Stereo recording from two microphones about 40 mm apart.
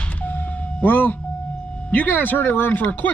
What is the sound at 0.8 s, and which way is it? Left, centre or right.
Speech, left.